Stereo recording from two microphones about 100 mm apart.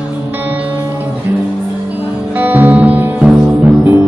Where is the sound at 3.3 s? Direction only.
5° right (ahead or behind).